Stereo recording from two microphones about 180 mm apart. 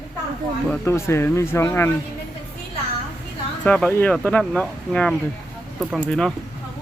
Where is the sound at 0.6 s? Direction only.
15° left (ahead or behind).